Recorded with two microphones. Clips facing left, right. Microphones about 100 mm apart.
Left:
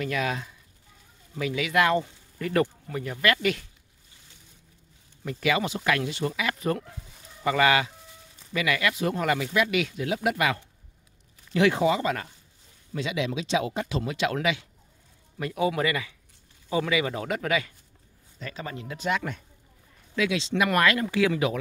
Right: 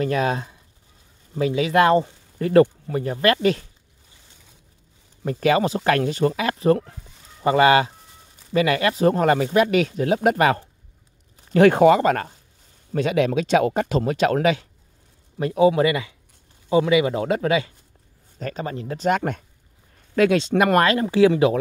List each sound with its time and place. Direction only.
0.0 s speech: 35° right (ahead or behind)
5.2 s speech: 40° right (ahead or behind)
15.3 s speech: 30° right (ahead or behind)
18.4 s speech: 40° right (ahead or behind)